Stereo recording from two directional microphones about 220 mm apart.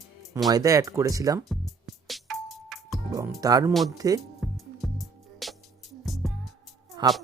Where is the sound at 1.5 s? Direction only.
Centre (ahead or behind).